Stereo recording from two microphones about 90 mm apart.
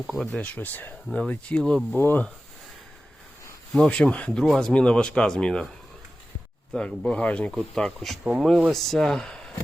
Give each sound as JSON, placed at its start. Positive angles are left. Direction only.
{"t": 0.1, "sound": "speech", "side_deg": 0}
{"t": 0.4, "sound": "speech", "side_deg": 20}
{"t": 1.0, "sound": "speech", "side_deg": 10}
{"t": 2.0, "sound": "speech", "side_deg": 20}
{"t": 3.8, "sound": "speech", "side_deg": 10}
{"t": 4.4, "sound": "speech", "side_deg": 5}
{"t": 6.7, "sound": "speech", "side_deg": 10}
{"t": 8.2, "sound": "speech", "side_deg": -10}
{"t": 8.7, "sound": "speech", "side_deg": 5}